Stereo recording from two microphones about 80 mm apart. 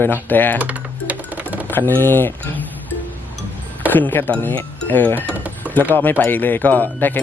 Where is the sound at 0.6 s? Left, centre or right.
Centre.